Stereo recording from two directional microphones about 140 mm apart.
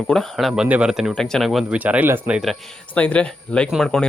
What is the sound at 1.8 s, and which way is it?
Speech, 10° right (ahead or behind).